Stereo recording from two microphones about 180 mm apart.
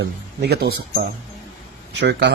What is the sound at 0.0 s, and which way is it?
Speech, 65° right (ahead or behind).